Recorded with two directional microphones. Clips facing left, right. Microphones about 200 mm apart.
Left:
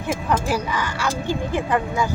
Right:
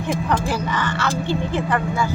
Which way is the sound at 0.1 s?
5° left (ahead or behind).